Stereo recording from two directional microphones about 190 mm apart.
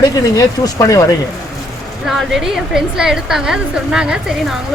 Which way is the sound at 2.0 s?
Centre (ahead or behind).